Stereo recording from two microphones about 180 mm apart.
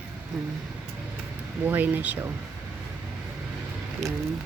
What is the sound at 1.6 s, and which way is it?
Speech, 10° right (ahead or behind).